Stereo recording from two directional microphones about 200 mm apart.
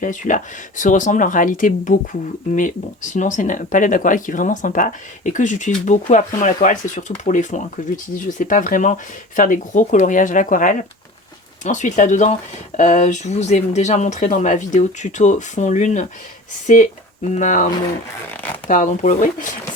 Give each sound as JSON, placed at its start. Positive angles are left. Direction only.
{"t": 0.0, "sound": "speech", "side_deg": 40}
{"t": 18.7, "sound": "speech", "side_deg": 40}